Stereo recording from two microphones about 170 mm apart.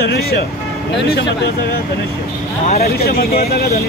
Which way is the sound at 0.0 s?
70° left (ahead or behind).